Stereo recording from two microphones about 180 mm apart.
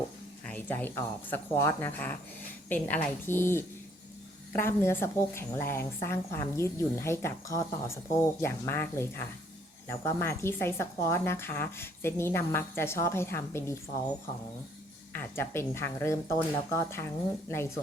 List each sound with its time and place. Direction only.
0.4 s a woman's voice: 10° left (ahead or behind)
15.1 s a woman's voice: 15° left (ahead or behind)